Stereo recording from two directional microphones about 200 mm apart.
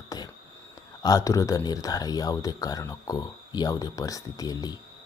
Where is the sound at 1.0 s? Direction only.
20° left (ahead or behind).